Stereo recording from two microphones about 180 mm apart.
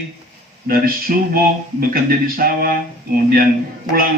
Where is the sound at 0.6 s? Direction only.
55° right (ahead or behind).